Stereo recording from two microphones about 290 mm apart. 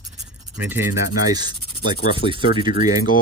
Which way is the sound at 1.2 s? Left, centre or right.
Centre.